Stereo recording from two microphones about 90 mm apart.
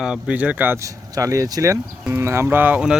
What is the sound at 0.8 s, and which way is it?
Speech, 40° right (ahead or behind).